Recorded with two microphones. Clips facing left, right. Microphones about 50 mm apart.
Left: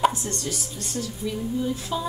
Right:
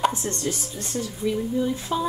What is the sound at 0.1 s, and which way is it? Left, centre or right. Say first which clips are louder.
Speech: right 3 dB; right.